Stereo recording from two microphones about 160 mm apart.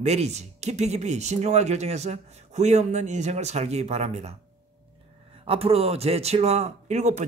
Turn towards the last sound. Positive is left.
turn(degrees=-45)  # may be behind; listen again after turning